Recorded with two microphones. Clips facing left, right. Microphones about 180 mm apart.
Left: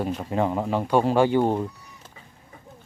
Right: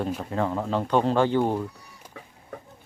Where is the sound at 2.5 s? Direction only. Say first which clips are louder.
Right 10 dB; 65° right (ahead or behind).